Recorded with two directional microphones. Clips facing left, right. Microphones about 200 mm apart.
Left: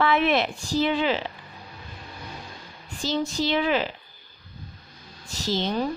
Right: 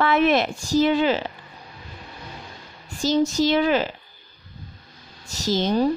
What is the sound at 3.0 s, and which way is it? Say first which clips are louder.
Speech: right 6 dB; 45° right (ahead or behind).